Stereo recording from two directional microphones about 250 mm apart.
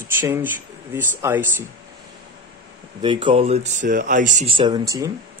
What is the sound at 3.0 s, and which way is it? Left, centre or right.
Speech, centre.